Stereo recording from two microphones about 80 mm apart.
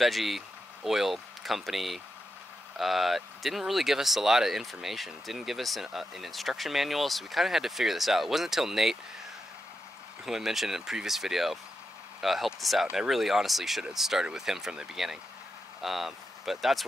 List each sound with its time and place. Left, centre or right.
0.0 s speech: centre
10.2 s speech: centre